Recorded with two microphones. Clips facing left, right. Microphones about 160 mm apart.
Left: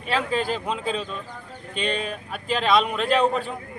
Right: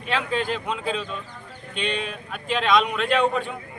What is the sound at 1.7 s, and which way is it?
Speech, 40° left (ahead or behind).